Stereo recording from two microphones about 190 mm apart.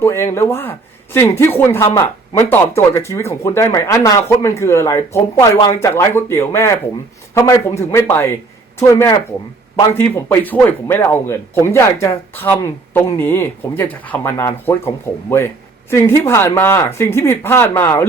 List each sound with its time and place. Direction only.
0.0 s speech: 15° left (ahead or behind)